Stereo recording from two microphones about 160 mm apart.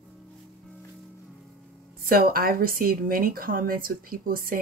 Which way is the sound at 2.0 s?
65° right (ahead or behind).